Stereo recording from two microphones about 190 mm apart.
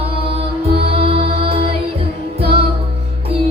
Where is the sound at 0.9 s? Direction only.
30° right (ahead or behind).